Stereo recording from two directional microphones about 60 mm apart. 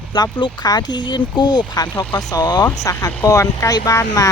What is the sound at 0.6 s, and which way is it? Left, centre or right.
Speech, left.